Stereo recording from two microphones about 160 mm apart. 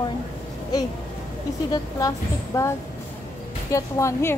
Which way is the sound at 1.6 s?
20° left (ahead or behind).